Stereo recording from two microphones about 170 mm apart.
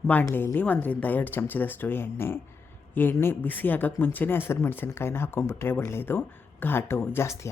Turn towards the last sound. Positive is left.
turn(degrees=15)  # may be behind; listen again after turning